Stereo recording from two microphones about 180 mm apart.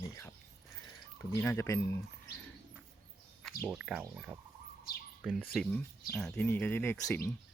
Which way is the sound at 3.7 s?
5° right (ahead or behind).